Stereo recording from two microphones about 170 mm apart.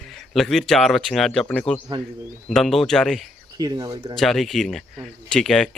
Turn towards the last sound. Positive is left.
turn(degrees=5)  # may be behind; listen again after turning